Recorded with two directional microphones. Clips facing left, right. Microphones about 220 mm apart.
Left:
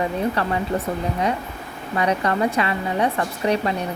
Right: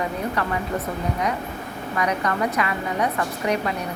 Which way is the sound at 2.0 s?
30° left (ahead or behind).